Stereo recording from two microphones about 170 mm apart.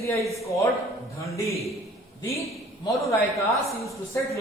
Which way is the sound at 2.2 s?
15° left (ahead or behind).